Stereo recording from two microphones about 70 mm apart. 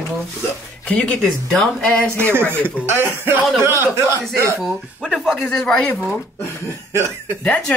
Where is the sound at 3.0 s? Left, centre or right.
Right.